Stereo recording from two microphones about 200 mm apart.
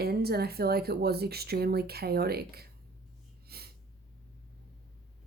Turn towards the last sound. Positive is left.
turn(degrees=-50)  # may be behind; listen again after turning